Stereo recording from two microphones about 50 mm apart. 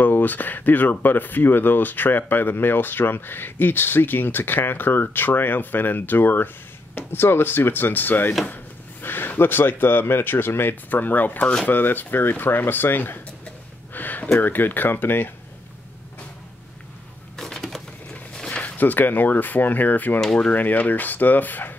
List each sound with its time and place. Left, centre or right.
0.0 s speech: left
13.9 s a sound: left
14.4 s speech: left
17.4 s a sound: centre
18.5 s speech: left
20.2 s speech: centre
20.5 s speech: left